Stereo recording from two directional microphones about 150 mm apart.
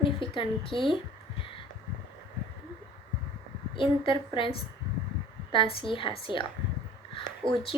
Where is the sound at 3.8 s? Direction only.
35° left (ahead or behind).